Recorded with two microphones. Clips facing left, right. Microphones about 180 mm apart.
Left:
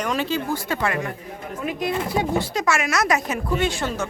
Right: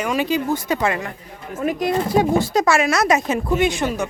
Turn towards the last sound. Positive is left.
turn(degrees=-15)  # may be behind; listen again after turning